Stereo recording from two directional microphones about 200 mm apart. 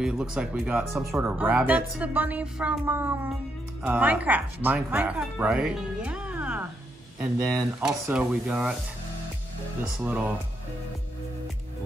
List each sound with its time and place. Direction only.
0.0 s speech: 5° right (ahead or behind)
7.8 s speech: 5° right (ahead or behind)
9.9 s speech: 10° right (ahead or behind)